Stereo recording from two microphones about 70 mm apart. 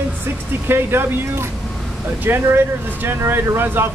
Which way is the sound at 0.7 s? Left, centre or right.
Right.